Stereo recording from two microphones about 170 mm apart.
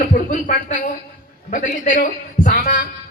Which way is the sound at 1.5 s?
50° left (ahead or behind).